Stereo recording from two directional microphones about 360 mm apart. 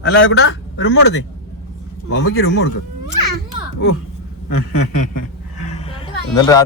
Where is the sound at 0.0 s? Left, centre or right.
Left.